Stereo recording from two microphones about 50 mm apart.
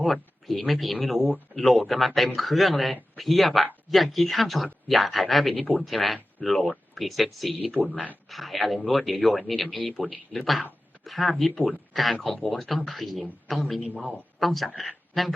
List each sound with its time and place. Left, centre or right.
0.0 s speech: centre
13.8 s a man's voice: right
14.3 s speech: centre